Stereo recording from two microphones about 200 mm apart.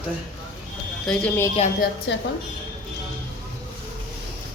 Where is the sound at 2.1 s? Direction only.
65° left (ahead or behind).